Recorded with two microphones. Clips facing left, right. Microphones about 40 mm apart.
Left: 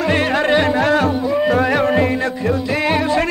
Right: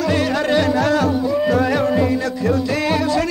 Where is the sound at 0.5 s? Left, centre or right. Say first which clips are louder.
Left 1 dB; left.